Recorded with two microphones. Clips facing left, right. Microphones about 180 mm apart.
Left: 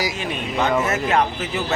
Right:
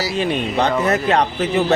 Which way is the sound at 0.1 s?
35° right (ahead or behind).